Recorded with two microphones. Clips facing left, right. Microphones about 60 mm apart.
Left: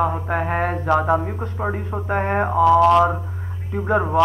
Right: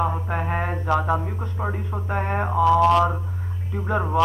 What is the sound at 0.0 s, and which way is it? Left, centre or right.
A man's voice, centre.